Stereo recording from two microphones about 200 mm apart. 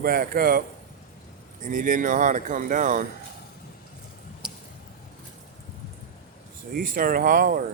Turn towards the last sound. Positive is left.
turn(degrees=-45)  # may be behind; listen again after turning